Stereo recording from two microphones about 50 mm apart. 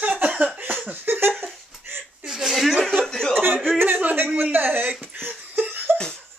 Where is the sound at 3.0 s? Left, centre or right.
Centre.